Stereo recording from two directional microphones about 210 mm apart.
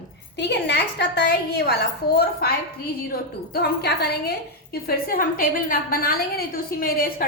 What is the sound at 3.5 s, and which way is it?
A woman's voice, 50° left (ahead or behind).